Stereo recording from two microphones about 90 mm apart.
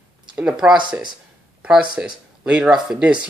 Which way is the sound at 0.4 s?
5° right (ahead or behind).